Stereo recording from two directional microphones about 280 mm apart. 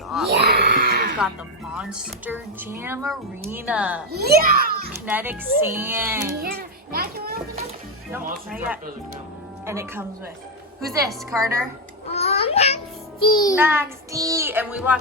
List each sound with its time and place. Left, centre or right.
0.3 s a sound: right
1.8 s speech: centre
4.1 s a child's voice: right
5.0 s a child's voice: centre
6.4 s a child's voice: right
8.1 s a child's voice: centre
12.0 s music: left
13.6 s a child's voice: centre